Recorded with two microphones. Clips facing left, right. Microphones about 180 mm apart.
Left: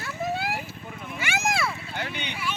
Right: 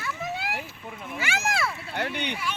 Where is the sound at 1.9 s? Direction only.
65° right (ahead or behind).